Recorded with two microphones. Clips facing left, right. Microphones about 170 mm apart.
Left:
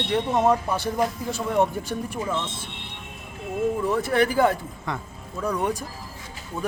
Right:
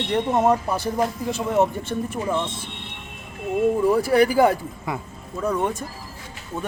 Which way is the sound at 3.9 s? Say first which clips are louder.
Right 4 dB; 5° right (ahead or behind).